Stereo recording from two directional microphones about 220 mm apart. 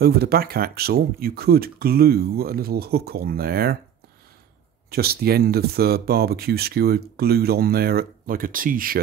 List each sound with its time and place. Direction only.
0.0 s speech: 45° right (ahead or behind)
4.9 s speech: 45° right (ahead or behind)